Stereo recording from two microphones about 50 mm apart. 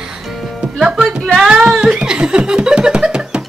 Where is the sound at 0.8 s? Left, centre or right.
Centre.